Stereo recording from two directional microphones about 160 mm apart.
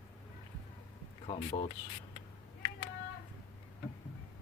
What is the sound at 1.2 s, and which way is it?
Speech, 40° left (ahead or behind).